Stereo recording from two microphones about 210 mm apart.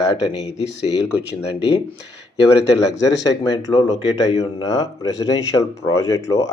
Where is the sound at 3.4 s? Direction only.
20° left (ahead or behind).